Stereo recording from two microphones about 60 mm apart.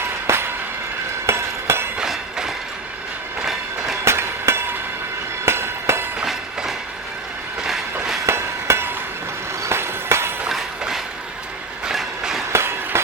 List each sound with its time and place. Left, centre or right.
0.3 s music: right
1.3 s a sound: right
3.4 s train: centre
4.0 s a sound: right
5.5 s train: right
6.2 s train: centre
8.3 s hammer: right
9.6 s a sound: right
10.5 s train: centre
12.5 s train: right